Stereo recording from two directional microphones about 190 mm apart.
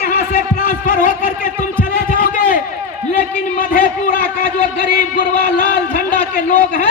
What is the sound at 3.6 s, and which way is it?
A man's voice, 45° left (ahead or behind).